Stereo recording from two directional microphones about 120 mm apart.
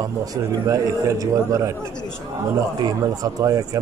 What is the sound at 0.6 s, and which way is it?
A man's voice, 25° right (ahead or behind).